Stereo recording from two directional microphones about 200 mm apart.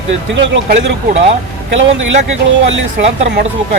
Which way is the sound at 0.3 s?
65° right (ahead or behind).